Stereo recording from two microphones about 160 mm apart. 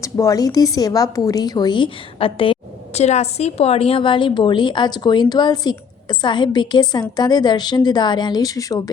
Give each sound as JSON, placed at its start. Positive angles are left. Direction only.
{"t": 0.0, "sound": "a woman's voice", "side_deg": 20}